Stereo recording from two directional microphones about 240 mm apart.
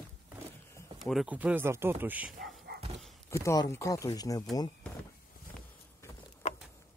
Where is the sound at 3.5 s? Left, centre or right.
Centre.